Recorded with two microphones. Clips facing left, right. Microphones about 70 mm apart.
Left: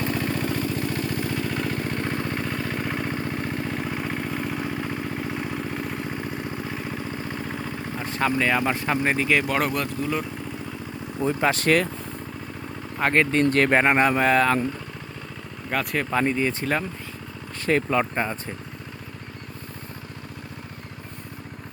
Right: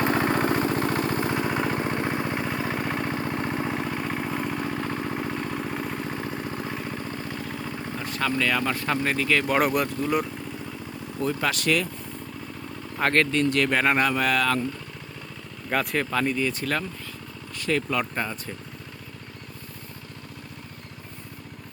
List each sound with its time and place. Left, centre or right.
0.0 s vehicle: right
1.4 s vehicle: right; by 8.0 s centre
8.0 s vehicle: left
8.3 s speech: left
9.5 s speech: centre
11.2 s speech: left
13.0 s speech: centre
13.4 s speech: left
13.8 s speech: left
15.7 s speech: centre
16.0 s speech: left